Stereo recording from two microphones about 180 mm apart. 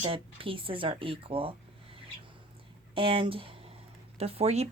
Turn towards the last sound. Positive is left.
turn(degrees=-35)  # may be behind; listen again after turning